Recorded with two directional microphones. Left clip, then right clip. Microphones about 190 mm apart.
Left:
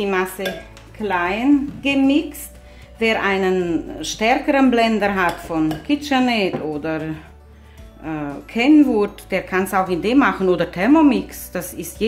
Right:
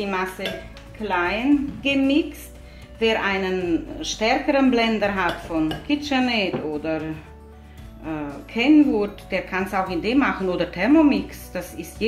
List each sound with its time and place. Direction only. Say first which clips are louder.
0.0 s speech: left 5 dB; 50° left (ahead or behind)